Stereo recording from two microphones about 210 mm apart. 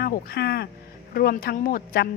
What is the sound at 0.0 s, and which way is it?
Speech, 45° left (ahead or behind).